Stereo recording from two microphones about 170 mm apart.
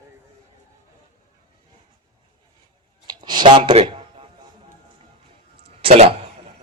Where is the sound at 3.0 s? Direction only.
25° right (ahead or behind).